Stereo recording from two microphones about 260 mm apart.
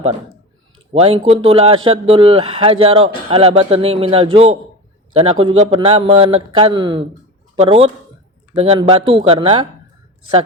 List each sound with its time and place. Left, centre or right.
0.9 s speech: right